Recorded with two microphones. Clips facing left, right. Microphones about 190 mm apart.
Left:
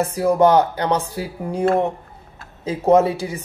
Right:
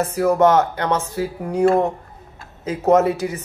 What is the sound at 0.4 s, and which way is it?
Speech, 35° left (ahead or behind).